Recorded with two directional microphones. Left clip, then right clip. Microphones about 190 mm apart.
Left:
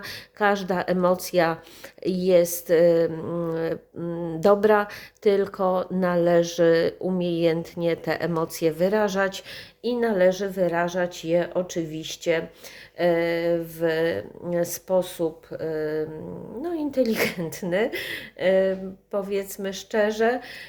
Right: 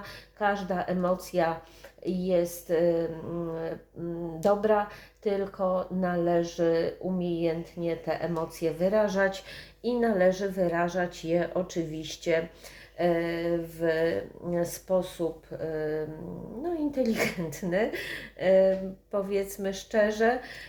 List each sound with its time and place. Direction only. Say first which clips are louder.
0.0 s speech: left 5 dB; 55° left (ahead or behind); by 20.4 s 40° left (ahead or behind)